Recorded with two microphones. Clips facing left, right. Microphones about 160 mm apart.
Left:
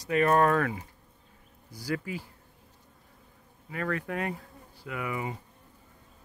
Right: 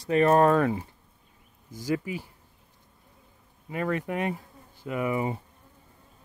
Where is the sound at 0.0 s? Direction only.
30° right (ahead or behind).